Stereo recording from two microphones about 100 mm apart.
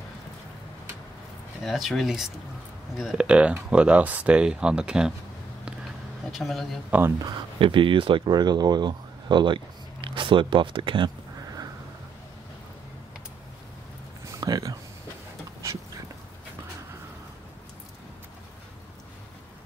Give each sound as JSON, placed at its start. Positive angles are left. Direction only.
{"t": 1.6, "sound": "speech", "side_deg": 0}
{"t": 6.3, "sound": "speech", "side_deg": 0}
{"t": 6.9, "sound": "speech", "side_deg": -25}
{"t": 7.5, "sound": "speech", "side_deg": -60}
{"t": 14.2, "sound": "a sound", "side_deg": -35}